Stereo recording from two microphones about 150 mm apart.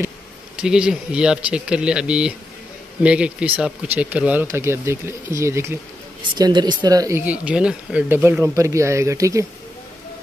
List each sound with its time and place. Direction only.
0.6 s speech: 5° right (ahead or behind)
6.3 s speech: 25° right (ahead or behind)